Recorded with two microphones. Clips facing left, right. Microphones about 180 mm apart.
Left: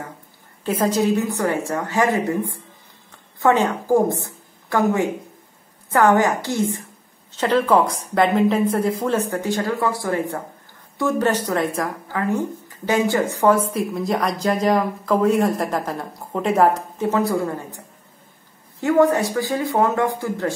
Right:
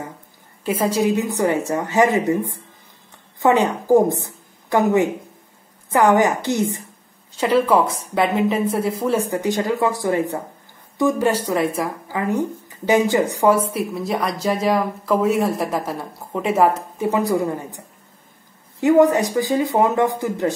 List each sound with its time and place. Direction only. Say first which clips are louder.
0.7 s speech: even; 10° right (ahead or behind)
3.3 s speech: right 1 dB; 15° right (ahead or behind)
7.3 s speech: right 1 dB; 10° right (ahead or behind)
18.8 s speech: right 2 dB; 20° right (ahead or behind)